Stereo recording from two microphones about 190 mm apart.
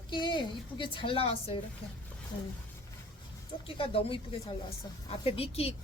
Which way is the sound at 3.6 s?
30° left (ahead or behind).